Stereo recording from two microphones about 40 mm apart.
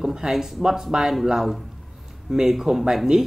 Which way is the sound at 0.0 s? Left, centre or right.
Centre.